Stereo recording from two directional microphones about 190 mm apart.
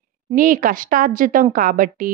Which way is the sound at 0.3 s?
45° right (ahead or behind).